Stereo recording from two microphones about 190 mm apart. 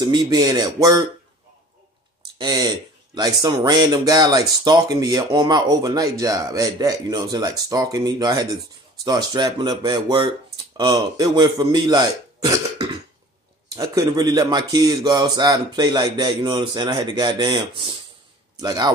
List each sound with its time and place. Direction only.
0.0 s speech: 20° right (ahead or behind)
2.3 s speech: 20° right (ahead or behind)